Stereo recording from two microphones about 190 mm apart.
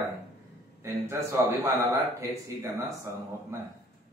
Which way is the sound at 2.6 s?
15° right (ahead or behind).